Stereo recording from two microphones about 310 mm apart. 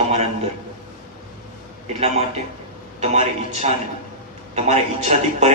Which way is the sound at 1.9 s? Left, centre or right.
Right.